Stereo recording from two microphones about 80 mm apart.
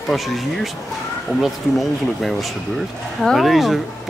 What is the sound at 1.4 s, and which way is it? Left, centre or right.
Speech, centre.